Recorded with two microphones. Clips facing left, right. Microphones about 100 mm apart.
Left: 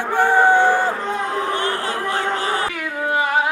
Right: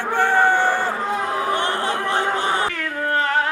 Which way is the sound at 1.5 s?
20° right (ahead or behind).